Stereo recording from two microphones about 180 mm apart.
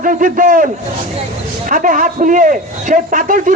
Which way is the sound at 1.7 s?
50° right (ahead or behind).